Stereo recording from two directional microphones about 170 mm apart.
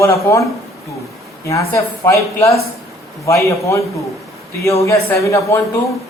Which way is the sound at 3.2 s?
20° left (ahead or behind).